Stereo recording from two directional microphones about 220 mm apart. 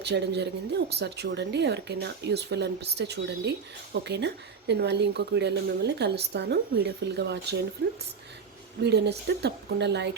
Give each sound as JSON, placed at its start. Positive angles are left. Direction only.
{"t": 0.0, "sound": "speech", "side_deg": -50}